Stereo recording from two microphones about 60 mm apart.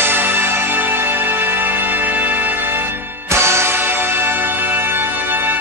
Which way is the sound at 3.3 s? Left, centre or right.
Right.